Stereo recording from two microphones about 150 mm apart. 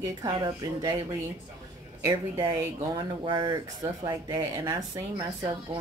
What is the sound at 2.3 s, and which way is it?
A woman's voice, 25° right (ahead or behind).